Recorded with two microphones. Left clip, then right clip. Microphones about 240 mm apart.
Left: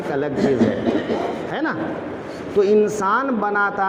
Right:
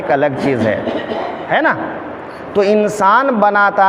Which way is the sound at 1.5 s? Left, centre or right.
Right.